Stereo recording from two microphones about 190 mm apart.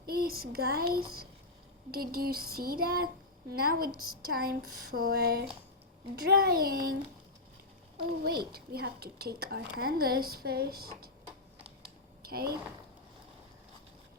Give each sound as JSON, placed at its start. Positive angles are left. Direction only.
{"t": 0.0, "sound": "speech", "side_deg": -50}
{"t": 8.2, "sound": "a woman's voice", "side_deg": -55}
{"t": 12.2, "sound": "speech", "side_deg": -55}